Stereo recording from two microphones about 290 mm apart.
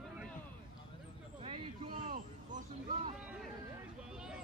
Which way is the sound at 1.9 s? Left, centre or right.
Right.